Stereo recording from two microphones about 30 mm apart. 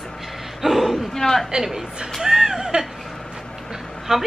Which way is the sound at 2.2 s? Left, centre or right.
Centre.